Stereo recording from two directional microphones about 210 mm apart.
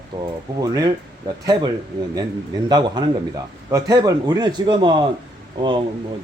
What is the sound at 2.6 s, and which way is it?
Speech, 20° right (ahead or behind).